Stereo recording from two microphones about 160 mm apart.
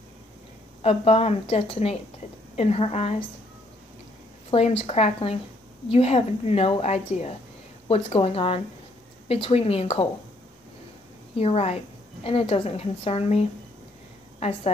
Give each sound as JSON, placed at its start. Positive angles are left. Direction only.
{"t": 0.8, "sound": "a woman's voice", "side_deg": 40}
{"t": 4.5, "sound": "a woman's voice", "side_deg": 40}
{"t": 11.3, "sound": "a woman's voice", "side_deg": 40}